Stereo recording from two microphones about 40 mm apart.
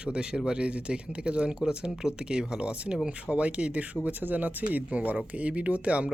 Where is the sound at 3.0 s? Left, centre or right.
Right.